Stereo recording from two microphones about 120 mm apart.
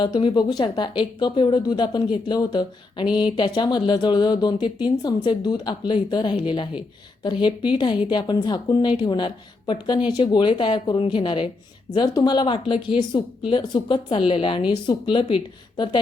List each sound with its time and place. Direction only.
0.0 s a woman's voice: 45° left (ahead or behind)